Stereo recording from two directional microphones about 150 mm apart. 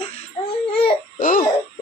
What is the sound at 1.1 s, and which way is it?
Baby laughter, 70° left (ahead or behind).